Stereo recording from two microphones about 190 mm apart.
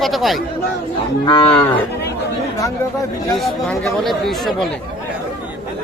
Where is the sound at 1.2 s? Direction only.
25° left (ahead or behind).